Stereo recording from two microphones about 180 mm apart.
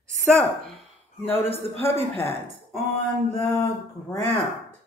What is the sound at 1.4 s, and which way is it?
Speech, 35° right (ahead or behind).